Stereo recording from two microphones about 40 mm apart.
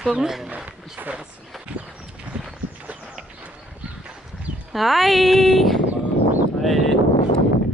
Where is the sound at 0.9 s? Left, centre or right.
Right.